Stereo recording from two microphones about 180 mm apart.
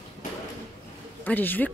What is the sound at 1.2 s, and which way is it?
Speech, 10° left (ahead or behind).